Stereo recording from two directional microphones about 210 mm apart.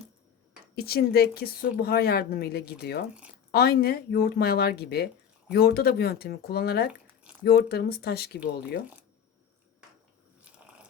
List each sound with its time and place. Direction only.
0.8 s speech: 45° left (ahead or behind)